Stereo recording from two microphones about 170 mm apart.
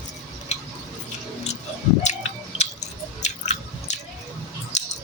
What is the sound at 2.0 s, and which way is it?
Squish, 40° left (ahead or behind).